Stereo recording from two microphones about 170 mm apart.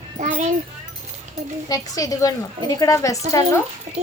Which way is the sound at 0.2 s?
45° right (ahead or behind).